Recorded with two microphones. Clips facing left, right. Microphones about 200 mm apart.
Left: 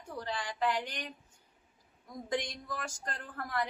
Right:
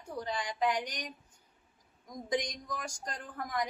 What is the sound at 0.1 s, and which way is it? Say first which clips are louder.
A woman's voice: right 2 dB; 15° right (ahead or behind).